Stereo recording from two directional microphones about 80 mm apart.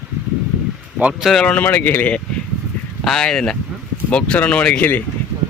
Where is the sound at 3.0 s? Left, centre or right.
Centre.